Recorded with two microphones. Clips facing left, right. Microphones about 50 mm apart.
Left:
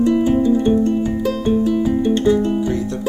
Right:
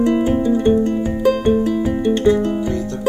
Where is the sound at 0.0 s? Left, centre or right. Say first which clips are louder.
Left 1 dB; right.